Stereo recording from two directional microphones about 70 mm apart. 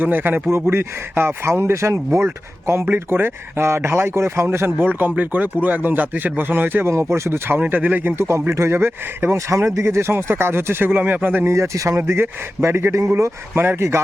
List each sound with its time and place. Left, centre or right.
0.0 s speech: right
7.6 s speech: right
8.2 s speech: right
9.5 s speech: right
11.4 s speech: right
11.9 s speech: right
13.5 s speech: right